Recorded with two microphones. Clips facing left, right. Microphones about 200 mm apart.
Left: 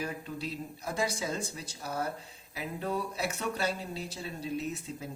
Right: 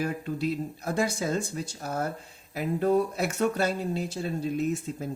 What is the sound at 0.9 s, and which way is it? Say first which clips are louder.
Speech: right 5 dB; 50° right (ahead or behind).